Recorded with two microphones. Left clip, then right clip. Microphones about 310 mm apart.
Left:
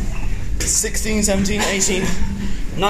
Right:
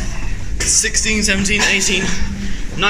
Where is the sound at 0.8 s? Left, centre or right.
Left.